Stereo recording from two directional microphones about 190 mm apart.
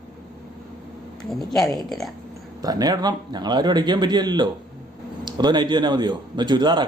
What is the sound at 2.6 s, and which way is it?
A man's voice, 20° right (ahead or behind).